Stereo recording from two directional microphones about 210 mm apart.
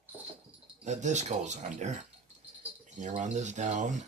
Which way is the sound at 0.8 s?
35° right (ahead or behind).